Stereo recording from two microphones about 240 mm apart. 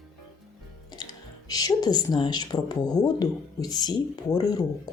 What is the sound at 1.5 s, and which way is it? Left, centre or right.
Speech, centre.